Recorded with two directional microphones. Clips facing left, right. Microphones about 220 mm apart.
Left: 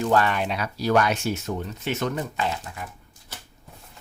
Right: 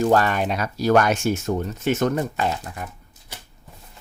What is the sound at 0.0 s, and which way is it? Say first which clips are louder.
Speech: right 3 dB; 45° right (ahead or behind).